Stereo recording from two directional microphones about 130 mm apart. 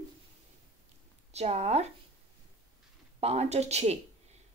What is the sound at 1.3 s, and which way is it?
Speech, 55° right (ahead or behind).